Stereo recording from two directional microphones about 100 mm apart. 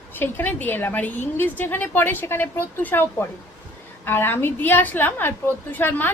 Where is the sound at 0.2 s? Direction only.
20° left (ahead or behind).